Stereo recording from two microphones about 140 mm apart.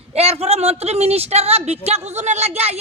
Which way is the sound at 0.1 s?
45° right (ahead or behind).